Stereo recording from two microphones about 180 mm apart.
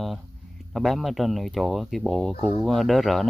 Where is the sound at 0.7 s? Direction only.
Centre (ahead or behind).